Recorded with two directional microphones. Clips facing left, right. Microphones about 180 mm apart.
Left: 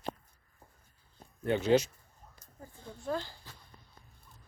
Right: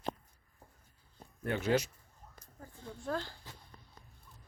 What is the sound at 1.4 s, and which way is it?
Speech, 20° left (ahead or behind).